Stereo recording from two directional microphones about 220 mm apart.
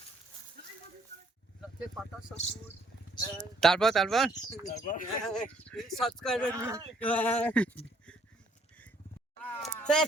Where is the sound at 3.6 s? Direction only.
Centre (ahead or behind).